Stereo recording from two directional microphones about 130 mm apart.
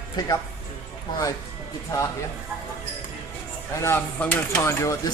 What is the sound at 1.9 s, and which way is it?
Speech, 25° left (ahead or behind).